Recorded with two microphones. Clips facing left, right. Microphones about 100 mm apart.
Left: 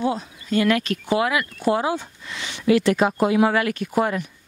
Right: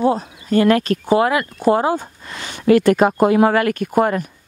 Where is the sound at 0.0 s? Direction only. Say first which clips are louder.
Right 6 dB; 40° right (ahead or behind).